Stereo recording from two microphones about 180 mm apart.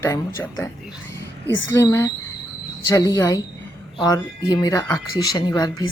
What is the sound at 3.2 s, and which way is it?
Speech, 20° left (ahead or behind).